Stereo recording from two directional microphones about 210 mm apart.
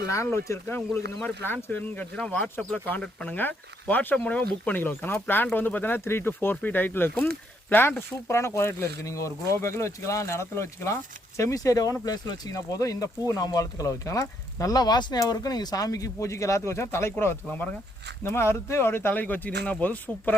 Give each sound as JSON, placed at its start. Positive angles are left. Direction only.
{"t": 0.1, "sound": "speech", "side_deg": 15}